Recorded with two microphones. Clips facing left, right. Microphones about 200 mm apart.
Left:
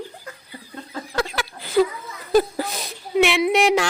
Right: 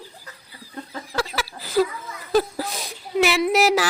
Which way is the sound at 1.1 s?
Centre (ahead or behind).